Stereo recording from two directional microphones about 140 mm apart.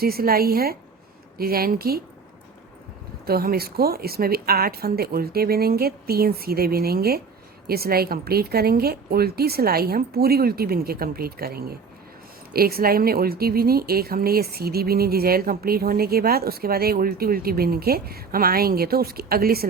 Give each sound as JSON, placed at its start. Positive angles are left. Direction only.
{"t": 0.0, "sound": "speech", "side_deg": -90}
{"t": 3.2, "sound": "speech", "side_deg": -90}